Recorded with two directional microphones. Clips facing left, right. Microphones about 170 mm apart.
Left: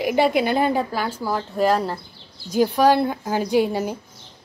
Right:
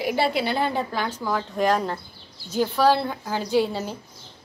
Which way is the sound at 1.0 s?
10° left (ahead or behind).